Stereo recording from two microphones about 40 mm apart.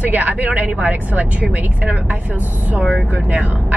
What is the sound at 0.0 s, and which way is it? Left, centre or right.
Speech, right.